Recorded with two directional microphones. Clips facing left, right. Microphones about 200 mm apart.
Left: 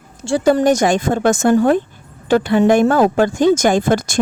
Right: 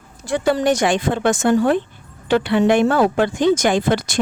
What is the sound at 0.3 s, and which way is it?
A woman's voice, 35° left (ahead or behind).